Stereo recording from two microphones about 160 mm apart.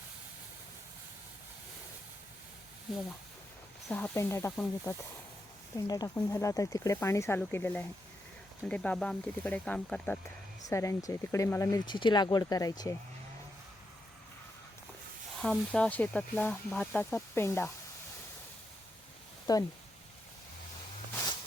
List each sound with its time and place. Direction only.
3.8 s speech: 15° left (ahead or behind)
10.7 s speech: 20° left (ahead or behind)
15.4 s speech: 5° left (ahead or behind)
19.5 s speech: 25° left (ahead or behind)